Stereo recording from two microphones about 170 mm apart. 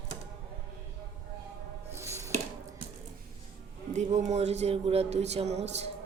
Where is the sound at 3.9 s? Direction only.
40° right (ahead or behind).